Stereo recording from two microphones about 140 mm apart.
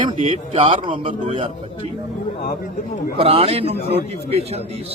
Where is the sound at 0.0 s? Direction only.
35° right (ahead or behind).